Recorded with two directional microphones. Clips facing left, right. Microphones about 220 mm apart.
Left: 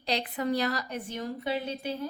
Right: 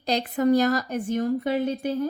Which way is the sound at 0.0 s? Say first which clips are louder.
Right 8 dB; 45° right (ahead or behind).